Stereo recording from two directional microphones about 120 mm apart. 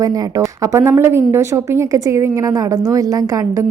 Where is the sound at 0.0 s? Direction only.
30° right (ahead or behind).